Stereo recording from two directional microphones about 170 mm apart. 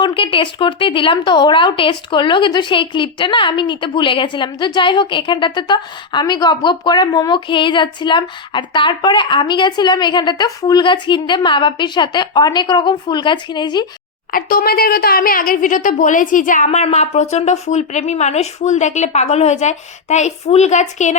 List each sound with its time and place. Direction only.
0.0 s speech: 30° left (ahead or behind)
14.3 s a woman's voice: 60° left (ahead or behind); by 21.2 s 45° left (ahead or behind)